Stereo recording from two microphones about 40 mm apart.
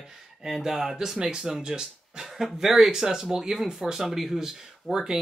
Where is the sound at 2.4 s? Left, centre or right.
Centre.